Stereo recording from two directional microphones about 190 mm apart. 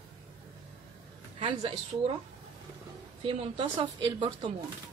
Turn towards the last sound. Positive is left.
turn(degrees=-30)  # may be behind; listen again after turning